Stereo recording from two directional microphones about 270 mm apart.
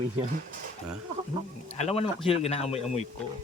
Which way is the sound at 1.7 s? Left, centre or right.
Left.